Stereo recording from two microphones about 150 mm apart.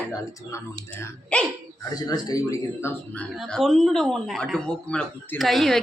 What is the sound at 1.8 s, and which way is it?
Speech, 25° left (ahead or behind).